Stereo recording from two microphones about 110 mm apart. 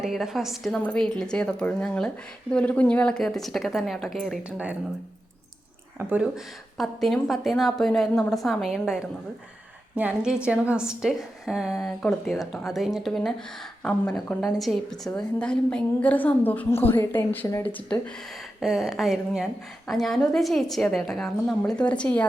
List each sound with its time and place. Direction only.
0.0 s a woman's voice: centre (ahead or behind)
4.5 s speech: 10° right (ahead or behind)
6.0 s speech: 15° right (ahead or behind)
6.2 s a woman's voice: centre (ahead or behind)
18.6 s a woman's voice: centre (ahead or behind)